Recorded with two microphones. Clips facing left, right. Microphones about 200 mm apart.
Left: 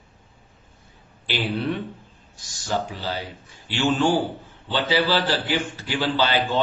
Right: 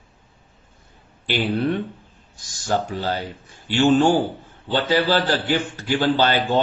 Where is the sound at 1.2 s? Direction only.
50° right (ahead or behind).